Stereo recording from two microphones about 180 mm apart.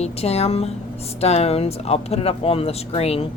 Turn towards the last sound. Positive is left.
turn(degrees=35)  # may be behind; listen again after turning